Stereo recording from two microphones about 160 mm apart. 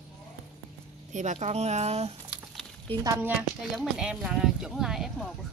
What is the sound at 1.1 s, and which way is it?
Speech, 50° right (ahead or behind).